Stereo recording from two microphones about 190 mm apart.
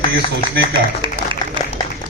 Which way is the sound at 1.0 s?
25° right (ahead or behind).